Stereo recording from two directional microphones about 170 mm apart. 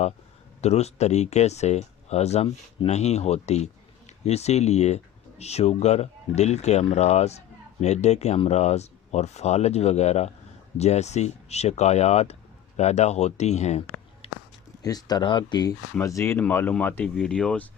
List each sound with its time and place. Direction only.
0.6 s speech: 40° left (ahead or behind)
14.2 s a sound: 35° left (ahead or behind)
14.8 s speech: 20° left (ahead or behind); by 17.7 s 5° left (ahead or behind)